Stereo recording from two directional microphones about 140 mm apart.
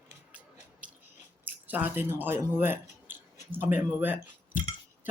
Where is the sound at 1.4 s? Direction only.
10° right (ahead or behind).